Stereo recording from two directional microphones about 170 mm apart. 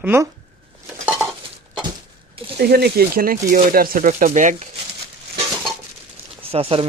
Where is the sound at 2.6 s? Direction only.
65° right (ahead or behind); by 4.6 s 45° right (ahead or behind).